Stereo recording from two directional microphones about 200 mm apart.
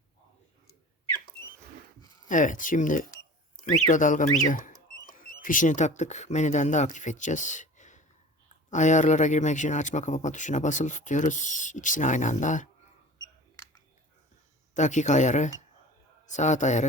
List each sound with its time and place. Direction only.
2.2 s speech: 40° left (ahead or behind)
14.8 s a man's voice: 35° left (ahead or behind)